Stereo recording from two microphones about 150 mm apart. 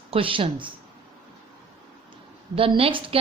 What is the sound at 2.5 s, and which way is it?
Speech, 35° right (ahead or behind).